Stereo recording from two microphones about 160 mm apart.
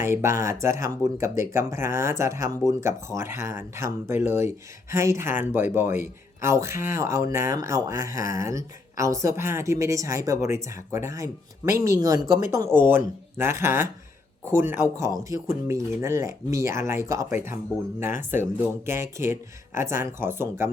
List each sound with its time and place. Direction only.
0.1 s speech: 20° right (ahead or behind)